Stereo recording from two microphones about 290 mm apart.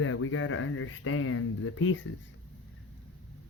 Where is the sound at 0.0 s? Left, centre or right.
Left.